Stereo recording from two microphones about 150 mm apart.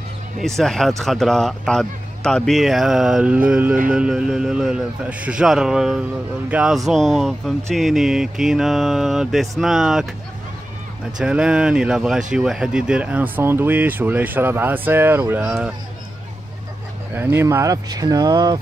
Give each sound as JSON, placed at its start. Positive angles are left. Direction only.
{"t": 0.4, "sound": "speech", "side_deg": 0}
{"t": 11.1, "sound": "speech", "side_deg": -5}
{"t": 15.4, "sound": "speech", "side_deg": -5}
{"t": 17.1, "sound": "speech", "side_deg": -15}